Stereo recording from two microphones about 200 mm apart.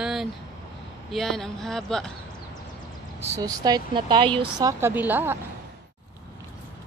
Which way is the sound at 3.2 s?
15° right (ahead or behind).